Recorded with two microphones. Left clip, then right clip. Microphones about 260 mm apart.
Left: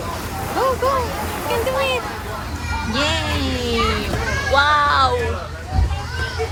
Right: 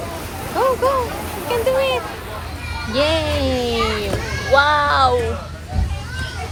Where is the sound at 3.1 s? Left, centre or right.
Centre.